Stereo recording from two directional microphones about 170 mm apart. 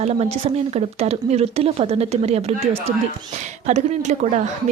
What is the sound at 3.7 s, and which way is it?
Speech, 40° right (ahead or behind).